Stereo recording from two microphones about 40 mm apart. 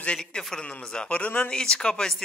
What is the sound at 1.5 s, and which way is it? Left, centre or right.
Speech, centre.